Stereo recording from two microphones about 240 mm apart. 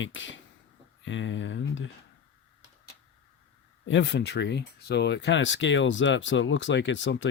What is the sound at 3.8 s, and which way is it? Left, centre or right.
Speech, left.